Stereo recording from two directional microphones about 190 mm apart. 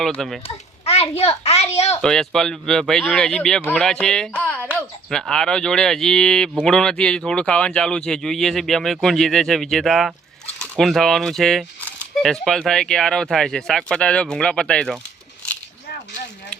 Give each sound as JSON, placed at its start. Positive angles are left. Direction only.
{"t": 0.0, "sound": "speech", "side_deg": 0}
{"t": 0.4, "sound": "a child's voice", "side_deg": 30}
{"t": 2.0, "sound": "speech", "side_deg": 5}